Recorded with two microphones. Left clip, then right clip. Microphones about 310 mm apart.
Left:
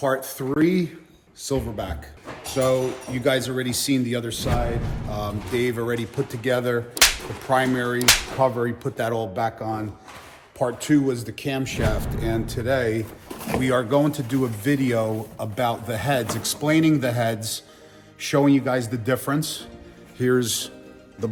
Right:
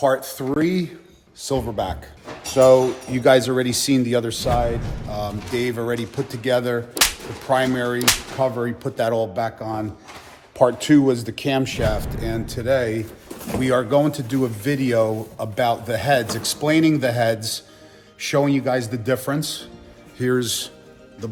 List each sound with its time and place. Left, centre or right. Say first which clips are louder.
0.0 s speech: right 4 dB; centre
5.0 s speech: right 3 dB; centre
10.6 s speech: right 6 dB; right
11.8 s speech: right 3 dB; centre